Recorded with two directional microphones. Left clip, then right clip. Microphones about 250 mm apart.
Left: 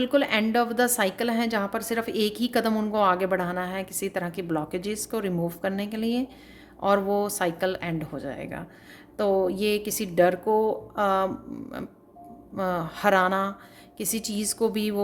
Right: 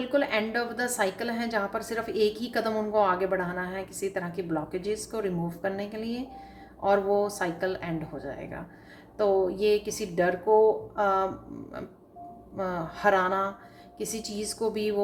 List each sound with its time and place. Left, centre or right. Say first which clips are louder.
0.0 s a woman's voice: left 3 dB; left
12.5 s a woman's voice: left 4 dB; left